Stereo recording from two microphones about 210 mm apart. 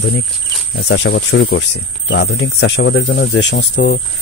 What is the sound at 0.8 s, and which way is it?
Speech, 60° left (ahead or behind).